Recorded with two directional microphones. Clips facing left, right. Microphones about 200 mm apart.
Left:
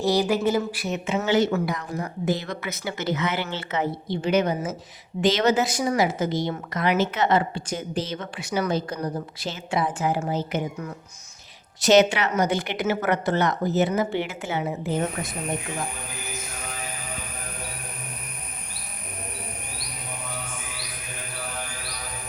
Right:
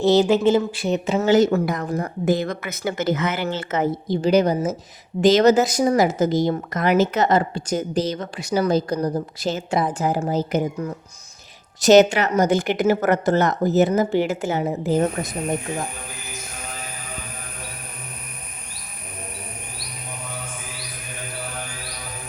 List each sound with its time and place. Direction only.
0.0 s a woman's voice: 25° right (ahead or behind); by 15.4 s 40° right (ahead or behind)